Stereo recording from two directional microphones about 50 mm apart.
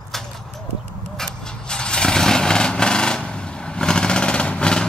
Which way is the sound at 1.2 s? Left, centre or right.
Centre.